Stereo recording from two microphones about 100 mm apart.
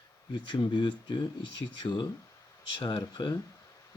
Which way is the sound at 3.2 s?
50° left (ahead or behind).